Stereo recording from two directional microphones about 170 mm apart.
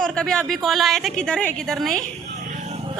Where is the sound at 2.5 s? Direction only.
45° right (ahead or behind).